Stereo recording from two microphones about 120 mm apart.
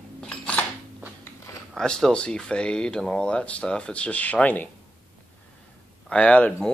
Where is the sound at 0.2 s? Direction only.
10° left (ahead or behind).